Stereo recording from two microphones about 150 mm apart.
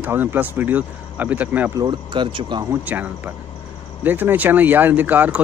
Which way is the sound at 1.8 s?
30° right (ahead or behind).